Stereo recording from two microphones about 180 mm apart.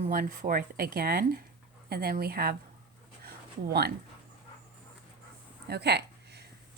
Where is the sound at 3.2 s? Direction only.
60° right (ahead or behind).